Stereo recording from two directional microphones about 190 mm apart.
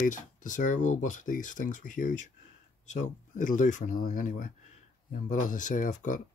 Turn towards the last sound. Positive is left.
turn(degrees=40)  # may be behind; listen again after turning